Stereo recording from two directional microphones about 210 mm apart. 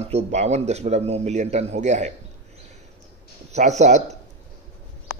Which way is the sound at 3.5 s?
35° right (ahead or behind).